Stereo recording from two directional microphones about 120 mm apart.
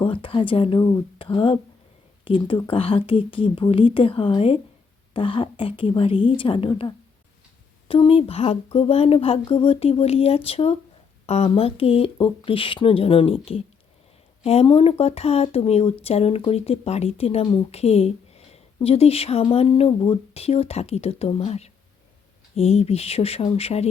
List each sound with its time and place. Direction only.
0.0 s speech: 50° left (ahead or behind)